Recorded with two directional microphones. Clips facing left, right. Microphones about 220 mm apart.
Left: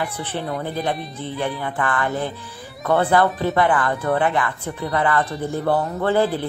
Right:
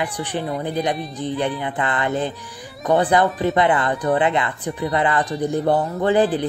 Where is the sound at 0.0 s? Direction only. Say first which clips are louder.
Right 2 dB; 15° right (ahead or behind).